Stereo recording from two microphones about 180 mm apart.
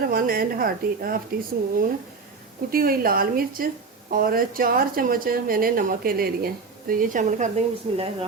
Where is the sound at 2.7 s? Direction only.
55° right (ahead or behind).